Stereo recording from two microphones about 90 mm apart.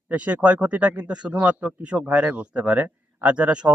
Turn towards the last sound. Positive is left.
turn(degrees=-15)  # may be behind; listen again after turning